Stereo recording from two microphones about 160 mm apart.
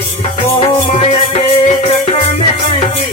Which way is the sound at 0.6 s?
40° left (ahead or behind).